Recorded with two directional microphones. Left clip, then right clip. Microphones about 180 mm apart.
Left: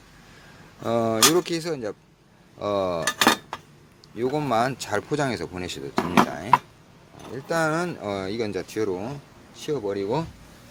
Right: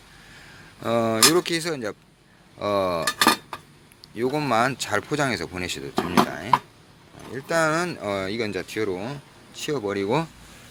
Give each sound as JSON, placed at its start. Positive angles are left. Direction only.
{"t": 0.8, "sound": "speech", "side_deg": 5}
{"t": 3.2, "sound": "cutlery", "side_deg": 20}
{"t": 4.1, "sound": "speech", "side_deg": 5}
{"t": 9.6, "sound": "speech", "side_deg": -15}